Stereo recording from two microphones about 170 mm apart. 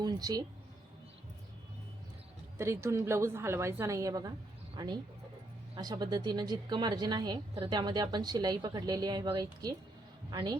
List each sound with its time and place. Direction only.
0.0 s speech: 20° right (ahead or behind)
2.6 s a woman's voice: 15° right (ahead or behind)